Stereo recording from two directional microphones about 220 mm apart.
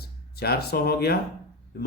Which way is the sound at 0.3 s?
45° left (ahead or behind).